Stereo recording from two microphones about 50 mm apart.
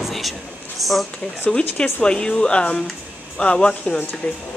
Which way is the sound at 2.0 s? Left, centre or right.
Centre.